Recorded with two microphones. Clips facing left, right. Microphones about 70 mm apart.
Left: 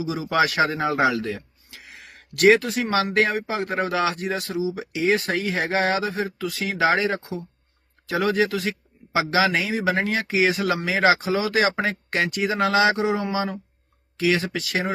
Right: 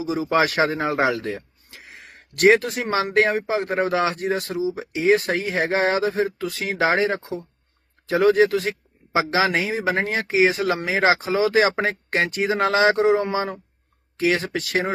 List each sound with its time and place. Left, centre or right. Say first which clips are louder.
0.0 s speech: right 2 dB; right